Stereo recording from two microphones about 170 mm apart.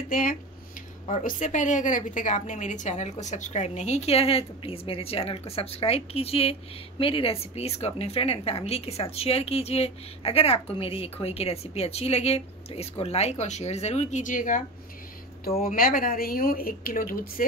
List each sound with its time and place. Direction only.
0.1 s a woman's voice: 55° left (ahead or behind)
15.6 s speech: 55° left (ahead or behind)